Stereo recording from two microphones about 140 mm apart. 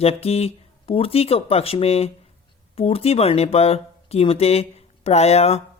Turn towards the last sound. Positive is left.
turn(degrees=50)  # may be behind; listen again after turning